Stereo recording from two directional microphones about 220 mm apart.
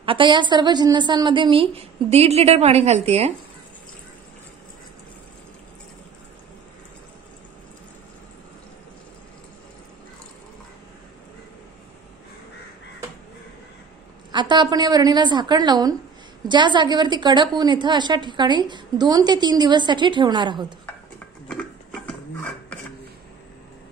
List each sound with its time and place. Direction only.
0.0 s a woman's voice: 25° right (ahead or behind)
14.3 s a woman's voice: 20° right (ahead or behind)
21.5 s a sound: 5° left (ahead or behind)